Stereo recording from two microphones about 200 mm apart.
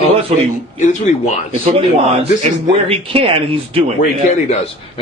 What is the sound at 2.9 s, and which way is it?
Speech, 30° right (ahead or behind).